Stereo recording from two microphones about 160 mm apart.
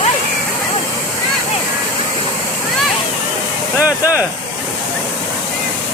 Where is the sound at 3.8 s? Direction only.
10° right (ahead or behind).